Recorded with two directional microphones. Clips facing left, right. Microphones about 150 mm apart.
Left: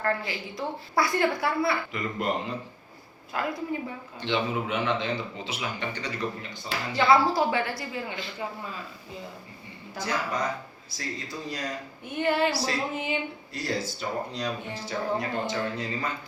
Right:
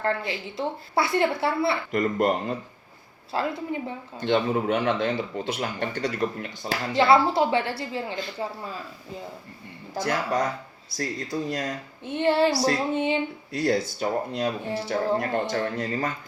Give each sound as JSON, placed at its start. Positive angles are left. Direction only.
{"t": 0.0, "sound": "a woman's voice", "side_deg": -25}
{"t": 1.9, "sound": "speech", "side_deg": -45}
{"t": 3.3, "sound": "a woman's voice", "side_deg": -25}
{"t": 4.2, "sound": "speech", "side_deg": -45}
{"t": 6.9, "sound": "a woman's voice", "side_deg": -25}
{"t": 8.4, "sound": "a sound", "side_deg": -35}
{"t": 10.0, "sound": "speech", "side_deg": -50}
{"t": 12.0, "sound": "a woman's voice", "side_deg": -30}
{"t": 12.9, "sound": "a sound", "side_deg": -30}
{"t": 13.5, "sound": "speech", "side_deg": -60}